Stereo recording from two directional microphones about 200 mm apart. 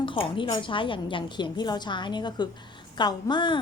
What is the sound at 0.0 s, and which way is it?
Speech, 25° left (ahead or behind).